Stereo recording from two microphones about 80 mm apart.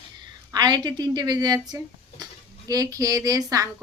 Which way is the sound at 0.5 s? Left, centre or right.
Right.